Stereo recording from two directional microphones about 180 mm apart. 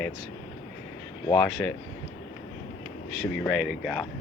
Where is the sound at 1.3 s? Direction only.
5° left (ahead or behind).